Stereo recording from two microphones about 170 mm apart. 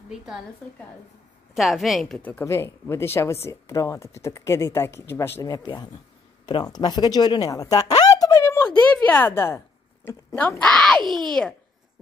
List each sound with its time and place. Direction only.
0.1 s a child's voice: 5° right (ahead or behind)
1.5 s a woman's voice: centre (ahead or behind)